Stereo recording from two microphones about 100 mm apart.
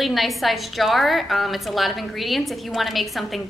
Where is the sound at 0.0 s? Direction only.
Centre (ahead or behind).